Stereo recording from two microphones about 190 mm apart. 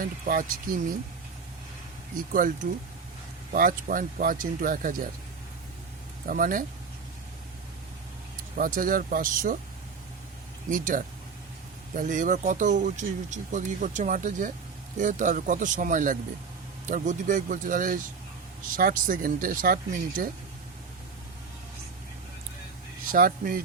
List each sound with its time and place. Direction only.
0.0 s speech: 45° right (ahead or behind)
2.3 s speech: 45° right (ahead or behind)
6.2 s speech: 45° right (ahead or behind)
8.5 s speech: 45° right (ahead or behind)
10.7 s speech: 45° right (ahead or behind)
23.1 s speech: 50° right (ahead or behind)